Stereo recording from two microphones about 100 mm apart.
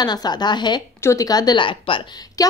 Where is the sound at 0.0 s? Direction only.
45° left (ahead or behind).